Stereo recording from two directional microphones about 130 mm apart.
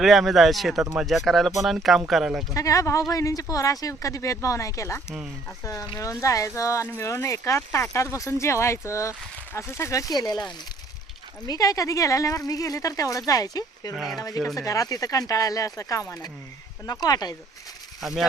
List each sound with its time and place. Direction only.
0.0 s speech: centre (ahead or behind)
2.5 s speech: 25° left (ahead or behind)
11.4 s speech: 30° left (ahead or behind)
13.9 s speech: centre (ahead or behind)
14.2 s speech: 30° left (ahead or behind)
18.0 s speech: centre (ahead or behind)